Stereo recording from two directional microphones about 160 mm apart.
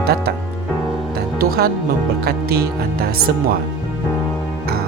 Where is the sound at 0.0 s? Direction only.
80° right.